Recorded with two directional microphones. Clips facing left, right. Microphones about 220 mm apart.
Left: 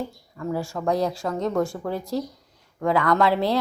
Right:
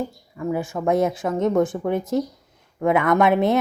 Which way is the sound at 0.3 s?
20° right (ahead or behind).